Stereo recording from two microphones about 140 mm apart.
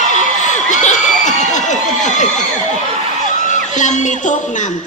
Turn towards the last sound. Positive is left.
turn(degrees=60)  # may be behind; listen again after turning